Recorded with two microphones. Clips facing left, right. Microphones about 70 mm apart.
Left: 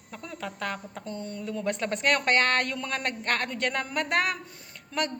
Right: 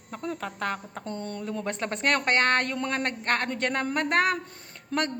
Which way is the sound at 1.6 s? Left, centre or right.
Right.